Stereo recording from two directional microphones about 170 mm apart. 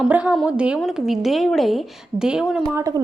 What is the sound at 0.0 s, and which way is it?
A woman's voice, 5° right (ahead or behind).